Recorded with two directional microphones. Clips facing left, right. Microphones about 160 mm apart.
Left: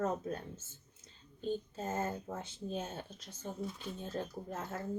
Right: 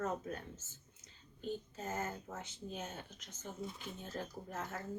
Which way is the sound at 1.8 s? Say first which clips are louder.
Left 4 dB; 30° left (ahead or behind).